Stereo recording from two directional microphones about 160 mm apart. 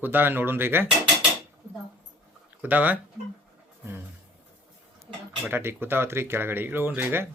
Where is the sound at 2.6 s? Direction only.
10° right (ahead or behind).